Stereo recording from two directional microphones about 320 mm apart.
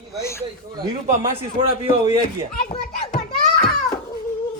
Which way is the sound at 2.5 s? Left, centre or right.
Left.